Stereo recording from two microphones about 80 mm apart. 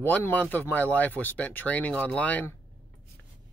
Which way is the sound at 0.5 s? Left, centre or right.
Left.